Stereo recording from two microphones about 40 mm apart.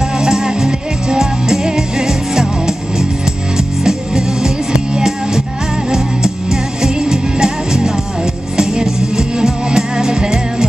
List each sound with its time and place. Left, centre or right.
0.2 s music: centre